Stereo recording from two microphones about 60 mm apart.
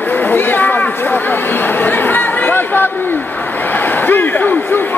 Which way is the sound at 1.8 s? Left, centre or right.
Left.